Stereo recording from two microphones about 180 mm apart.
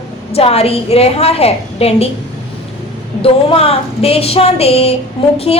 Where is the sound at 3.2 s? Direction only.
30° left (ahead or behind).